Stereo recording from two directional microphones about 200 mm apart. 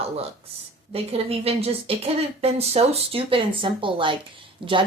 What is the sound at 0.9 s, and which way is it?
A woman's voice, 30° right (ahead or behind).